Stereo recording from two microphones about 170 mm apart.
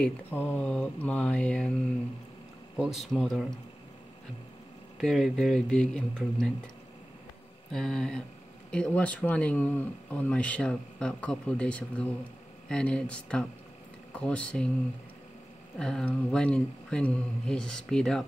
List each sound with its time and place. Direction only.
0.0 s speech: 10° left (ahead or behind)
2.8 s speech: centre (ahead or behind)
4.9 s speech: centre (ahead or behind)
7.7 s speech: centre (ahead or behind)
15.8 s speech: 5° left (ahead or behind)